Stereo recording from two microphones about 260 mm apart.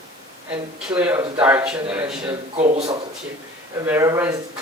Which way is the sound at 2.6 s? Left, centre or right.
Right.